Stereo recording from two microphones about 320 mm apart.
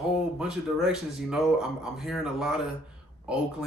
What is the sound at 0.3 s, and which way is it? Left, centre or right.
Speech, centre.